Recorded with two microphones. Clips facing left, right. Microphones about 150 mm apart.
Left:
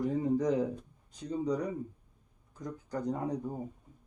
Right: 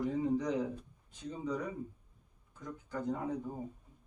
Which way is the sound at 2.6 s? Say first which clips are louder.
Left 3 dB; 40° left (ahead or behind).